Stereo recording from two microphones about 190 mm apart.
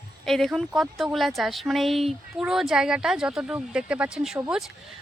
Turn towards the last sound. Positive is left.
turn(degrees=0)  # may be behind; listen again after turning